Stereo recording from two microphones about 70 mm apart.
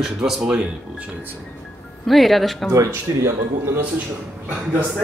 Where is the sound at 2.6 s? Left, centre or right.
Right.